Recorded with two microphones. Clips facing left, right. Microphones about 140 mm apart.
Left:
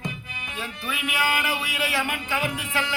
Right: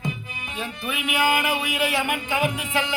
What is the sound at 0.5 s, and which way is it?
Music, 20° right (ahead or behind).